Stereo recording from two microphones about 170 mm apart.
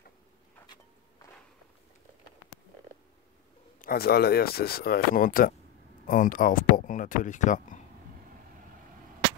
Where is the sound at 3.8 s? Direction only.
65° left (ahead or behind); by 7.7 s 45° left (ahead or behind).